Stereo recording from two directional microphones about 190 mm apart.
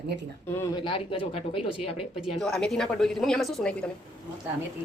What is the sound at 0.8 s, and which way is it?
Speech, 30° left (ahead or behind).